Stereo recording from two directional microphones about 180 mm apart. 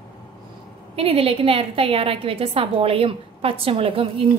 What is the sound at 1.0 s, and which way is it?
A woman's voice, 30° right (ahead or behind).